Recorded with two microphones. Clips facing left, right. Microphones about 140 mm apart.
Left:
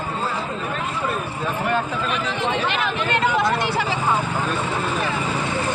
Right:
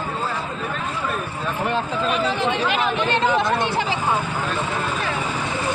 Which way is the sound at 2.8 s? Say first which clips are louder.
Right 1 dB; 25° right (ahead or behind).